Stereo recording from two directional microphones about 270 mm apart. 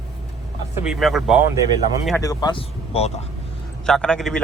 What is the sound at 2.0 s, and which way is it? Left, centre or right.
Speech, centre.